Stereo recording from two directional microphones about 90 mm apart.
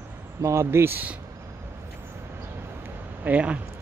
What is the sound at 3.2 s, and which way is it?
Speech, 15° right (ahead or behind).